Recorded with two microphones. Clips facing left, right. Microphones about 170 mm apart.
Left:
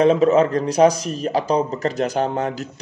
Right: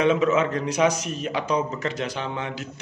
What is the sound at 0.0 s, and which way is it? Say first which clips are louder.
Speech: left 6 dB; 35° left (ahead or behind).